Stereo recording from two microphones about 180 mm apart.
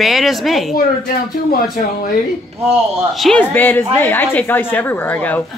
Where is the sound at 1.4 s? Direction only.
55° left (ahead or behind).